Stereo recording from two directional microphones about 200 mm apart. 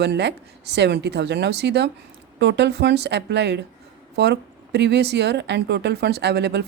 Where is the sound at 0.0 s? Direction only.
55° right (ahead or behind).